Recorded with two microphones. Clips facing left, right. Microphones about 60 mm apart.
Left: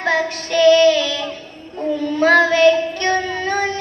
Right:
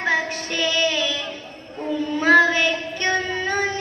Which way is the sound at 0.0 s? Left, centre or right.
Centre.